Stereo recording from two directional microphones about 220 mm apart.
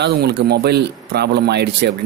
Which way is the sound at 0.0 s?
50° right (ahead or behind).